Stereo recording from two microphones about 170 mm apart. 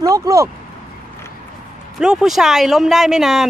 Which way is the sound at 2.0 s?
5° right (ahead or behind).